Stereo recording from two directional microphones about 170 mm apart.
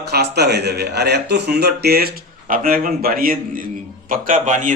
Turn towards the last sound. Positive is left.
turn(degrees=-50)  # may be behind; listen again after turning